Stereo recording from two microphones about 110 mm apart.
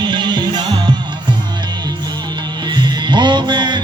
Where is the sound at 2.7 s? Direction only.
45° right (ahead or behind).